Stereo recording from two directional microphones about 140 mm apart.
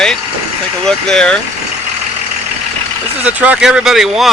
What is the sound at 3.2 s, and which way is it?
Speech, 10° right (ahead or behind).